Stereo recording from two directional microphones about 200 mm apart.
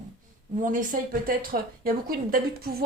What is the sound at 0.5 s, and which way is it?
A woman's voice, 40° right (ahead or behind).